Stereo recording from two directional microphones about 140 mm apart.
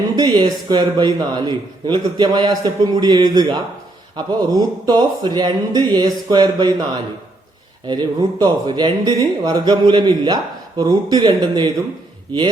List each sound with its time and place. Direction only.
0.2 s a man's voice: 30° right (ahead or behind)